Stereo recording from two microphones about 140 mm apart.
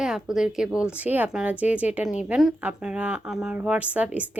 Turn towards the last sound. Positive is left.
turn(degrees=-10)  # may be behind; listen again after turning